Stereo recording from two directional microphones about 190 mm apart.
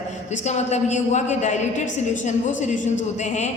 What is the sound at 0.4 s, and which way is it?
A woman's voice, 35° left (ahead or behind).